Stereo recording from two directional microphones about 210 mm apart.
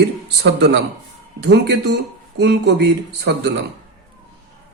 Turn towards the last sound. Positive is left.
turn(degrees=-50)  # may be behind; listen again after turning